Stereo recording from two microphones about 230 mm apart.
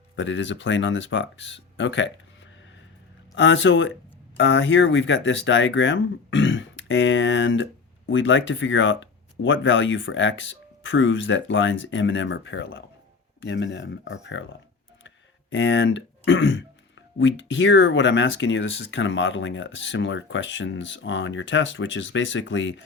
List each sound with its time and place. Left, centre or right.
0.2 s speech: left
3.3 s speech: left
15.0 s throat clearing: left
17.2 s speech: left